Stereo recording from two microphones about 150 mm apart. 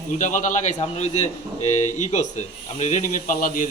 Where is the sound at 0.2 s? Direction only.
60° left (ahead or behind).